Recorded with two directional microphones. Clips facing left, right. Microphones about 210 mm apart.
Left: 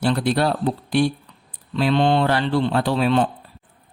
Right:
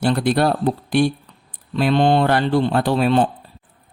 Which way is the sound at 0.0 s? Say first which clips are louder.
Right 2 dB; 50° right (ahead or behind).